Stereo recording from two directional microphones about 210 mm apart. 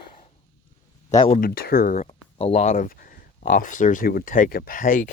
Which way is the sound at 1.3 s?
45° left (ahead or behind).